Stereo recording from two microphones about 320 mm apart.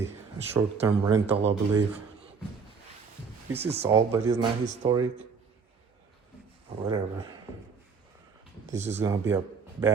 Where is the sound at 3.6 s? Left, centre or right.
Centre.